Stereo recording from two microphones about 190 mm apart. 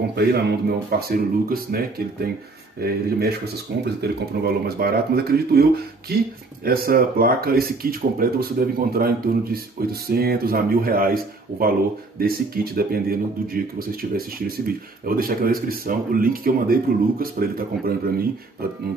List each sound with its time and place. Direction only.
0.1 s speech: 60° right (ahead or behind)